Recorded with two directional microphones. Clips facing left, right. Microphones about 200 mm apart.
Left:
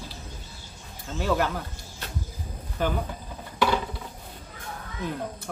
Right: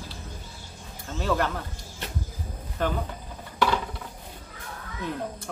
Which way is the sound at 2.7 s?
5° left (ahead or behind).